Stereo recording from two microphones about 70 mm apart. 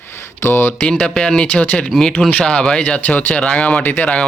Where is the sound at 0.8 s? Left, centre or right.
Centre.